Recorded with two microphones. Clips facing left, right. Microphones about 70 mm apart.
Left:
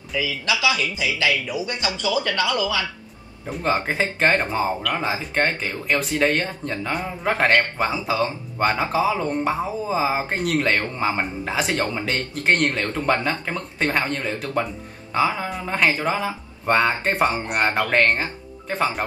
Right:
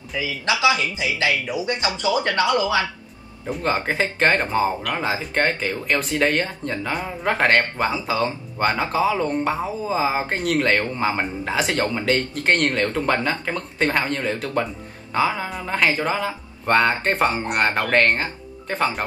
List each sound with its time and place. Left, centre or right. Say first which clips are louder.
0.2 s speech: right 2 dB; right
3.4 s speech: even; centre
17.5 s speech: right 1 dB; centre
17.9 s speech: right 1 dB; centre